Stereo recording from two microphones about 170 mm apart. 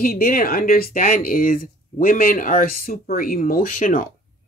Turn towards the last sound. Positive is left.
turn(degrees=55)  # may be behind; listen again after turning